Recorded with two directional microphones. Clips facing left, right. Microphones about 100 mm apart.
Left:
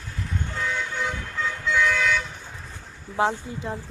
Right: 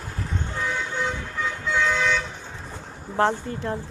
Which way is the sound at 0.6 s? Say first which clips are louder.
Right 1 dB; 20° right (ahead or behind).